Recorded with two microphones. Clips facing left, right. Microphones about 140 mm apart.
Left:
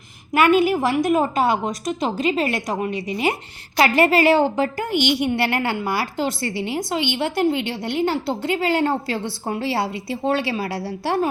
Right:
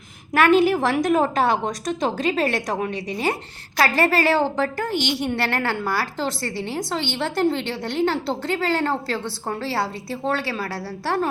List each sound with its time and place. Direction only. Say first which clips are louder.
0.3 s a woman's voice: even; 10° left (ahead or behind)